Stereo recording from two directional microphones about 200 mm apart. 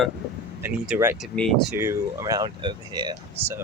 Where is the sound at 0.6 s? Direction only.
10° right (ahead or behind).